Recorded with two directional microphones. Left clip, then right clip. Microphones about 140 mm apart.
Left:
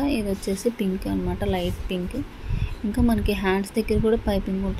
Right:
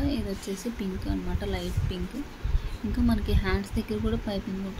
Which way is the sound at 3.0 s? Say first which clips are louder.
Left 7 dB; 25° left (ahead or behind).